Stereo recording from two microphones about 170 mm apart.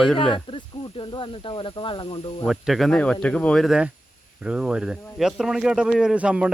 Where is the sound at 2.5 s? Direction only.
Centre (ahead or behind).